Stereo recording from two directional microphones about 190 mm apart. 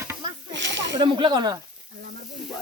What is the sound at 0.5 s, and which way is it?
Speech, 70° right (ahead or behind).